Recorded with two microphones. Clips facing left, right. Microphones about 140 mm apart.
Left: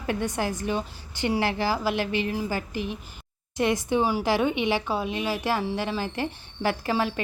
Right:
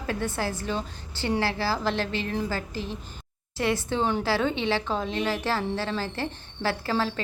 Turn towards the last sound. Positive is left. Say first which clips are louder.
# left 1 dB
turn(degrees=15)  # may be behind; listen again after turning